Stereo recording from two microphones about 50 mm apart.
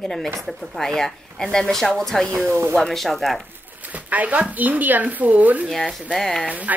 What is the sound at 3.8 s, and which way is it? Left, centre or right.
Speech, right.